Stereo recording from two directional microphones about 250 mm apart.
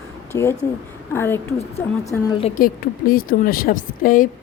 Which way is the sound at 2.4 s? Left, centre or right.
Left.